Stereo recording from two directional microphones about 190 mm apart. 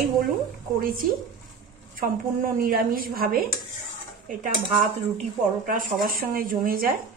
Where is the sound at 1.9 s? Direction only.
50° right (ahead or behind).